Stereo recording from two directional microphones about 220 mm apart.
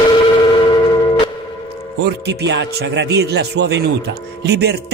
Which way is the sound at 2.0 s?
50° right (ahead or behind).